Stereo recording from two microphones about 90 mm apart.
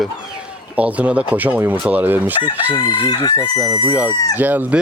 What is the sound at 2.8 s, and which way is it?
Chicken, 55° left (ahead or behind).